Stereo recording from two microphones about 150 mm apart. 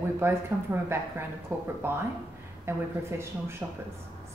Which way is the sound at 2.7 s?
15° right (ahead or behind).